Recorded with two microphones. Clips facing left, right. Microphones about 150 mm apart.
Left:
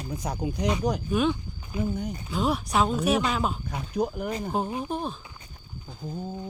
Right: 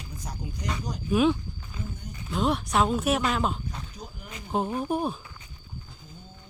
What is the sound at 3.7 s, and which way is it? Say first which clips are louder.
Speech: left 13 dB; 65° left (ahead or behind).